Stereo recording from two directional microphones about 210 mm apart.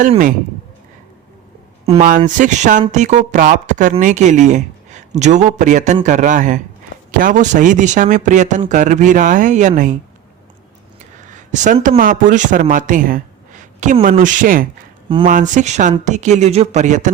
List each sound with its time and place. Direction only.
0.0 s speech: 40° right (ahead or behind)
2.0 s speech: 40° right (ahead or behind)
11.3 s speech: 35° right (ahead or behind)